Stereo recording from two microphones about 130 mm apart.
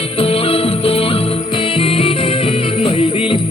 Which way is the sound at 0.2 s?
45° left (ahead or behind).